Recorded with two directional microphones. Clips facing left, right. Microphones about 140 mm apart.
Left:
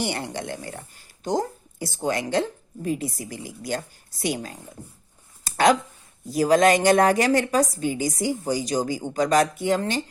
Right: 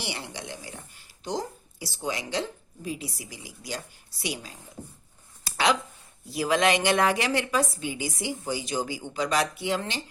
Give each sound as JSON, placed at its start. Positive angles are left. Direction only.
{"t": 0.0, "sound": "speech", "side_deg": 50}
{"t": 5.4, "sound": "a sound", "side_deg": 45}
{"t": 6.2, "sound": "speech", "side_deg": 45}